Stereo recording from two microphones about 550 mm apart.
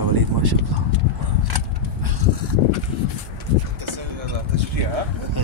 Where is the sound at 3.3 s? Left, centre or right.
Right.